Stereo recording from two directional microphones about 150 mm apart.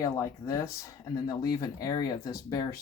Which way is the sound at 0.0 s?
25° left (ahead or behind).